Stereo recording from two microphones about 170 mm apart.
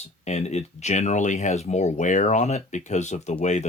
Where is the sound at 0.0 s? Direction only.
40° left (ahead or behind).